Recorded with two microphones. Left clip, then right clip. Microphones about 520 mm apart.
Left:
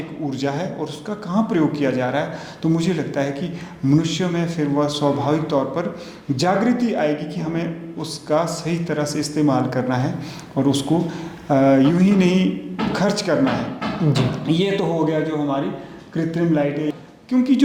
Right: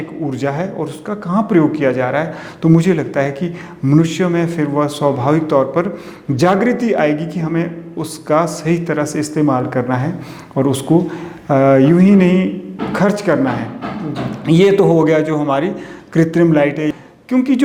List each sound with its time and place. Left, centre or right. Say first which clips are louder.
0.3 s a man's voice: right 4 dB; right
14.4 s a man's voice: right 12 dB; right